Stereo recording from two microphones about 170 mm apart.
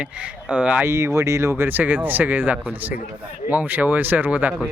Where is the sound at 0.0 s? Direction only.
5° right (ahead or behind).